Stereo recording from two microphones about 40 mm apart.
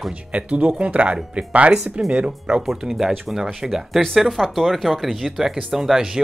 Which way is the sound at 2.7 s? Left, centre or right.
Centre.